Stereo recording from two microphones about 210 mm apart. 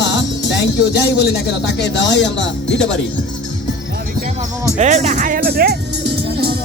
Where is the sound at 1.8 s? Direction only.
55° left (ahead or behind).